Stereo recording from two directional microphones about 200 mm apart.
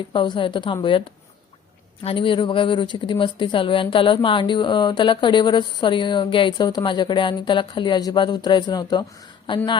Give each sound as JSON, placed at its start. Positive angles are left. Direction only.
{"t": 0.1, "sound": "a woman's voice", "side_deg": 25}
{"t": 2.0, "sound": "a woman's voice", "side_deg": 25}